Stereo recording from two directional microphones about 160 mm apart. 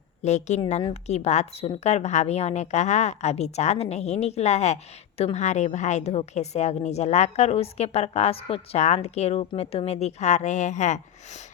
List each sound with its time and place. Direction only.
0.2 s a woman's voice: 45° left (ahead or behind)